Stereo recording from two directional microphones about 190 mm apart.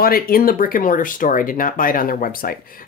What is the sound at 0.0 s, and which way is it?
Speech, 50° left (ahead or behind).